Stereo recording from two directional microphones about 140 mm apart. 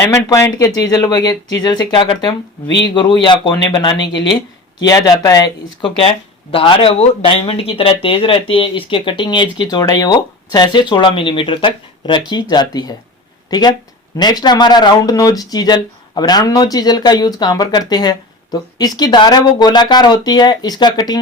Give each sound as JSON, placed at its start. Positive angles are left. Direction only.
{"t": 0.1, "sound": "speech", "side_deg": 20}
{"t": 5.8, "sound": "speech", "side_deg": 40}